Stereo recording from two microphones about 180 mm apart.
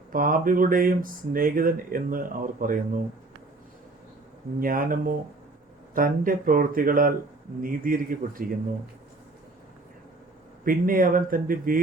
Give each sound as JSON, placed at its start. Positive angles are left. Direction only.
{"t": 0.1, "sound": "speech", "side_deg": -50}
{"t": 4.6, "sound": "speech", "side_deg": -50}
{"t": 10.7, "sound": "speech", "side_deg": -50}